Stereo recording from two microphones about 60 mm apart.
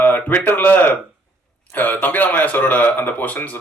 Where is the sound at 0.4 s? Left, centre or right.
Left.